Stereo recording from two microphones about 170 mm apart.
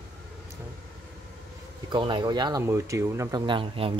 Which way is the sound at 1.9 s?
30° right (ahead or behind).